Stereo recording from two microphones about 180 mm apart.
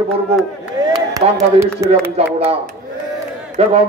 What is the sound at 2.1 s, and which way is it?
A man's voice, 35° right (ahead or behind).